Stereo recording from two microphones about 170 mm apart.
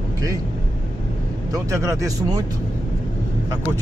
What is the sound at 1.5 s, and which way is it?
Speech, 15° right (ahead or behind).